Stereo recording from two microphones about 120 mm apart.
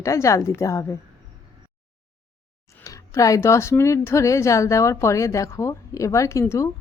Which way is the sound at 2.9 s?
25° left (ahead or behind).